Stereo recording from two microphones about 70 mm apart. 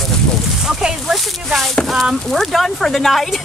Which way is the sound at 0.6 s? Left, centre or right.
Centre.